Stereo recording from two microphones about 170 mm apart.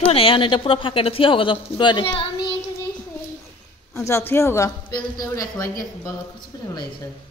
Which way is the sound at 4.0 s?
15° left (ahead or behind).